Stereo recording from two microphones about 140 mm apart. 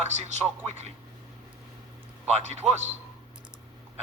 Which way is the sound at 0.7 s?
50° right (ahead or behind).